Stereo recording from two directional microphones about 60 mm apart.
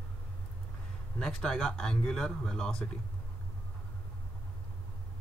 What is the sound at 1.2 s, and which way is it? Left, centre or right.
Speech, centre.